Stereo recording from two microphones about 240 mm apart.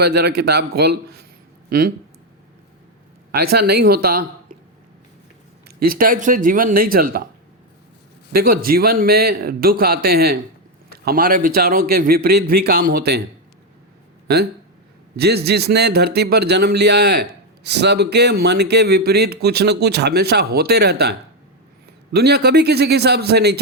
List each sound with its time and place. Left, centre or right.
0.0 s a man's voice: right
3.5 s a man's voice: right
5.6 s a man's voice: right
8.3 s a man's voice: right
14.3 s speech: right